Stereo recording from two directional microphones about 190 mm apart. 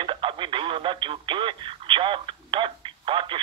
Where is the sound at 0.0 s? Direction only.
25° right (ahead or behind).